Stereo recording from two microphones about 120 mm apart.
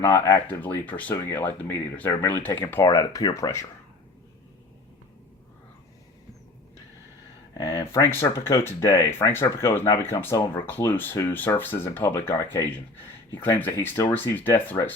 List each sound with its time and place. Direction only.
0.0 s speech: 30° left (ahead or behind)
0.4 s speech: 15° left (ahead or behind)
2.8 s speech: 30° left (ahead or behind)
7.6 s speech: 40° left (ahead or behind)
7.9 s speech: 20° left (ahead or behind)